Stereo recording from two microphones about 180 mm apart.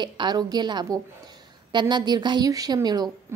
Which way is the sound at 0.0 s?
25° right (ahead or behind).